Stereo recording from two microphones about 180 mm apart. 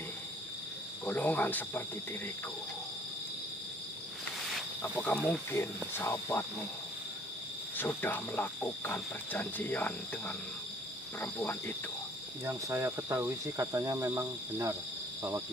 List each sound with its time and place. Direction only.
1.0 s speech: 10° left (ahead or behind)
4.6 s speech: 10° left (ahead or behind)
7.7 s speech: 10° left (ahead or behind)
12.4 s cricket: 15° right (ahead or behind)